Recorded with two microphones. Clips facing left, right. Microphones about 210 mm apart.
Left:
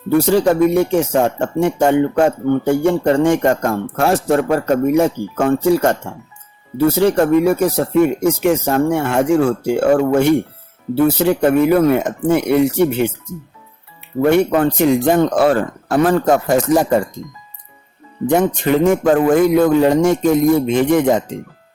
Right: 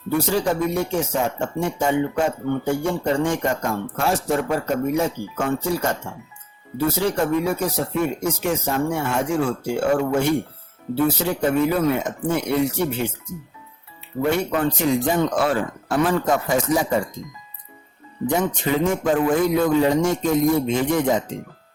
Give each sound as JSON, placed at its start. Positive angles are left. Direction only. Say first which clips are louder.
{"t": 0.1, "sound": "speech", "louder": "left 8 dB", "side_deg": 65}
{"t": 14.5, "sound": "speech", "louder": "left 6 dB", "side_deg": 60}
{"t": 18.3, "sound": "speech", "louder": "left 7 dB", "side_deg": 65}